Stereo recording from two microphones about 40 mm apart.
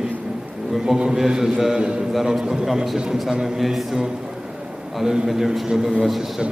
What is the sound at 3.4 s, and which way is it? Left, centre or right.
Speech, centre.